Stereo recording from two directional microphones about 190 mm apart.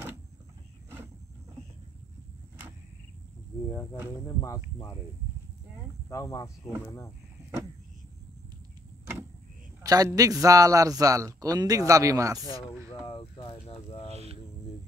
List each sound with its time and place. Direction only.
6.0 s speech: 20° left (ahead or behind)
9.8 s a man's voice: 20° right (ahead or behind)
12.9 s speech: 25° left (ahead or behind)
14.1 s a sound: 30° right (ahead or behind)